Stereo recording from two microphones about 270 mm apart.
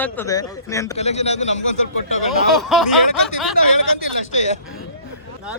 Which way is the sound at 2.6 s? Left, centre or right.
Centre.